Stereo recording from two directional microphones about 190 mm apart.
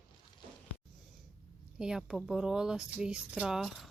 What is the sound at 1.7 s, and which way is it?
Speech, 5° right (ahead or behind).